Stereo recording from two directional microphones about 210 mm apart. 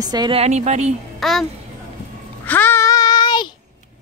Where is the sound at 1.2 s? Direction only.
Centre (ahead or behind).